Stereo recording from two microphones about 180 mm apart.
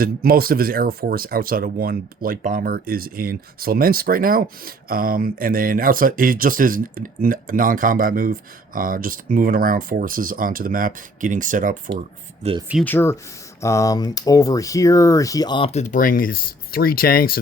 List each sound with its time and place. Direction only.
0.0 s speech: 55° right (ahead or behind)
12.4 s speech: 30° right (ahead or behind)
12.8 s speech: 10° left (ahead or behind); by 17.4 s 55° left (ahead or behind)